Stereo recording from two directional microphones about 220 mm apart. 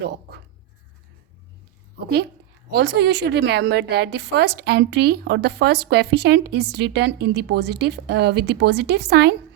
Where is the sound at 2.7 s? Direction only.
50° right (ahead or behind).